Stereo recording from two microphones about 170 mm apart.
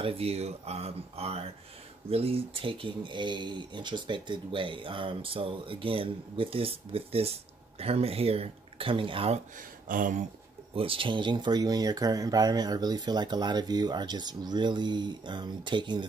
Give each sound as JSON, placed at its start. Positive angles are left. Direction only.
{"t": 0.0, "sound": "speech", "side_deg": -35}
{"t": 9.8, "sound": "speech", "side_deg": -50}
{"t": 10.7, "sound": "speech", "side_deg": -30}